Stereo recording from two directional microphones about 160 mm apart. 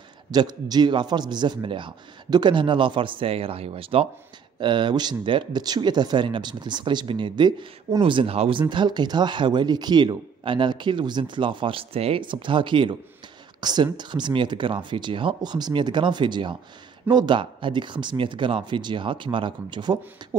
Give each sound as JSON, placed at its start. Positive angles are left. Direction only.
{"t": 0.3, "sound": "a man's voice", "side_deg": -25}